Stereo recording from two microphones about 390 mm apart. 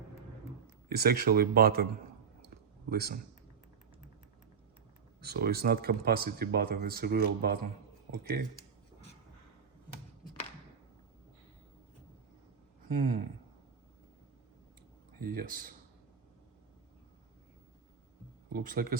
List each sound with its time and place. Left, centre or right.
0.9 s speech: right
2.9 s speech: right
5.2 s speech: right
15.2 s speech: right
18.5 s speech: right